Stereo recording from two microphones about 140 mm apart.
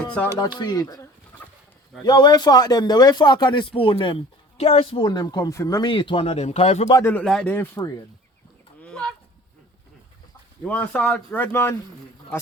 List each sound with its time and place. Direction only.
0.3 s speech: 30° left (ahead or behind)
2.0 s speech: 30° left (ahead or behind)
5.0 s speech: 30° left (ahead or behind); by 6.8 s 50° left (ahead or behind)
7.0 s speech: 15° left (ahead or behind)
8.8 s fowl: 5° left (ahead or behind)
10.6 s speech: 10° left (ahead or behind)